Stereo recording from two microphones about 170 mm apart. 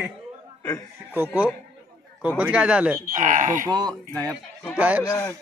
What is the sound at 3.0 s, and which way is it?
Speech, 50° right (ahead or behind).